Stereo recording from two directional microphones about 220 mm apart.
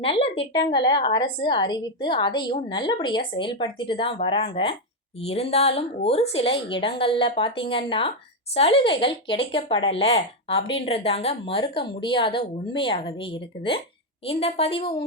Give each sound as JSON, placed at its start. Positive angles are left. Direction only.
{"t": 0.0, "sound": "speech", "side_deg": 25}